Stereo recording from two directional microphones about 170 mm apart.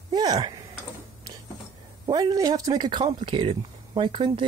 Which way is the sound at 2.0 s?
20° right (ahead or behind).